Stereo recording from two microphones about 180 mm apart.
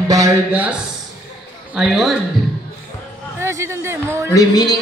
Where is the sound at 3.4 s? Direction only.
15° right (ahead or behind).